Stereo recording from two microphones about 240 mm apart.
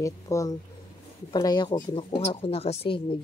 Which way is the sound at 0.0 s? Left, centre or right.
Centre.